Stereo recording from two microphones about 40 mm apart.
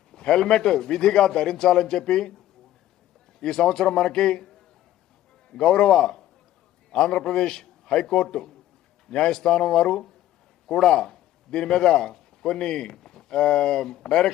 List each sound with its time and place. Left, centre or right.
0.1 s a man's voice: centre
3.4 s a man's voice: centre
5.5 s a man's voice: centre
10.8 s a man's voice: centre